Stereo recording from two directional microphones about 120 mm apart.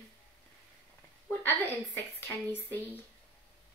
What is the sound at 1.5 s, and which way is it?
Speech, 15° left (ahead or behind).